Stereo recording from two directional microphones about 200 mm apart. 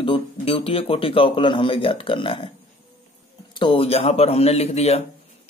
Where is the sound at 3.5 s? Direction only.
25° left (ahead or behind).